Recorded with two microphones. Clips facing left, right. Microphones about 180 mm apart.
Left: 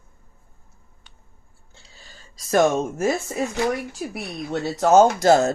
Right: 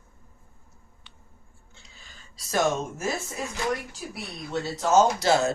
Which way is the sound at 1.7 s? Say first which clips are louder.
Left 4 dB; 35° left (ahead or behind).